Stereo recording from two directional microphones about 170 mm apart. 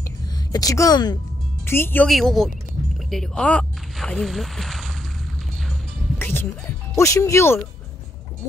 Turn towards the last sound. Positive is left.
turn(degrees=15)  # may be behind; listen again after turning